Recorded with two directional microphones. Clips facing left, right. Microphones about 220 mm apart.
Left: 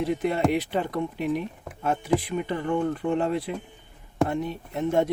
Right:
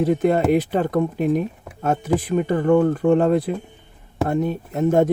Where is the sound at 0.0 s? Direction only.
45° right (ahead or behind).